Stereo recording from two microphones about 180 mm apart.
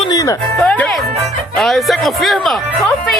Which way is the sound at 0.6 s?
5° left (ahead or behind).